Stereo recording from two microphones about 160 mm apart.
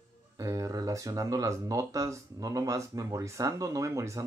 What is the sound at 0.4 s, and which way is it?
Speech, 20° right (ahead or behind).